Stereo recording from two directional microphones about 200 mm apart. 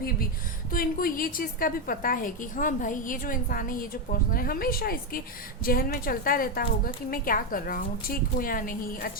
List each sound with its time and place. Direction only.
0.7 s a woman's voice: 45° left (ahead or behind)